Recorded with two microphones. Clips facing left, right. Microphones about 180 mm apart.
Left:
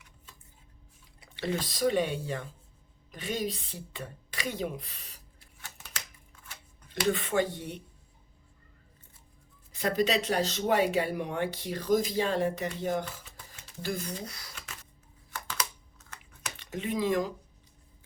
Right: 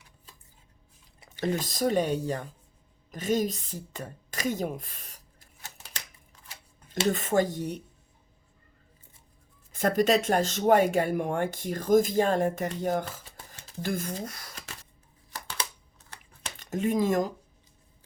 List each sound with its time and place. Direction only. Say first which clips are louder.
1.2 s speech: right 3 dB; 45° right (ahead or behind)
6.4 s shuffling cards: right 1 dB; 35° right (ahead or behind)
9.7 s speech: right 4 dB; 50° right (ahead or behind)
15.3 s a sound: even; 35° right (ahead or behind)